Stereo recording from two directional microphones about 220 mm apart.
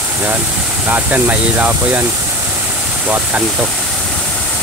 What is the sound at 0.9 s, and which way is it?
Speech, 5° right (ahead or behind).